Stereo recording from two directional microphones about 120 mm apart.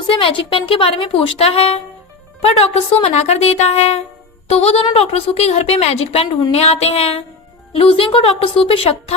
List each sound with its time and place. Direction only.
0.1 s a woman's voice: 45° left (ahead or behind)